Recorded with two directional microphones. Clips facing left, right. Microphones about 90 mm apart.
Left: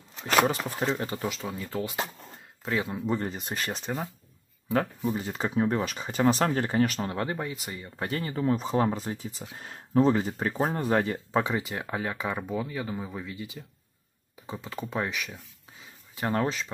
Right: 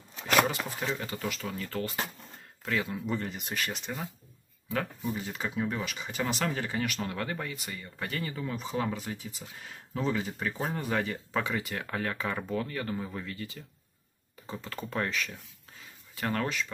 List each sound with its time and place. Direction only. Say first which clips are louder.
0.9 s speech: left 4 dB; 30° left (ahead or behind); by 15.3 s 15° left (ahead or behind)
16.2 s speech: left 3 dB; 25° left (ahead or behind)